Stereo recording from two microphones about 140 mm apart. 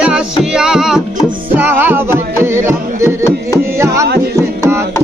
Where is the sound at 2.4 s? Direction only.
20° right (ahead or behind).